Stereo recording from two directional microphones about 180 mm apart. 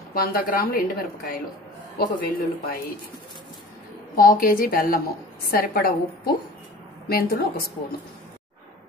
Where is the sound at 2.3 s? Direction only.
50° left (ahead or behind).